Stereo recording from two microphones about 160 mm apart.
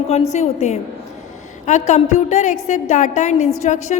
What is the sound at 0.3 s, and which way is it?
A woman's voice, 45° left (ahead or behind).